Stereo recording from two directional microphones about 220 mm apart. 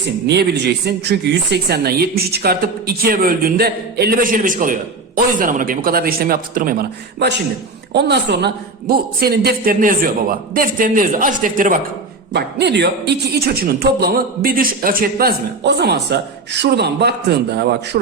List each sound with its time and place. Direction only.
0.3 s a woman's voice: 50° right (ahead or behind)
12.3 s speech: 50° right (ahead or behind)